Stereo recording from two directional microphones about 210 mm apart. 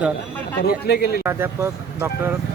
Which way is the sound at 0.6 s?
50° left (ahead or behind).